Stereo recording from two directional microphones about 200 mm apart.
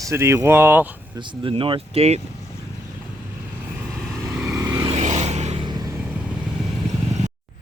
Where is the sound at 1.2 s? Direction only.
25° right (ahead or behind).